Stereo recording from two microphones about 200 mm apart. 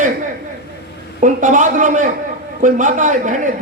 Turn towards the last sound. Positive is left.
turn(degrees=-40)  # may be behind; listen again after turning